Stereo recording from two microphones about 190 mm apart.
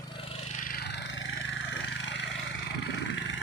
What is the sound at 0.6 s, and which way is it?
Vehicle, 50° left (ahead or behind).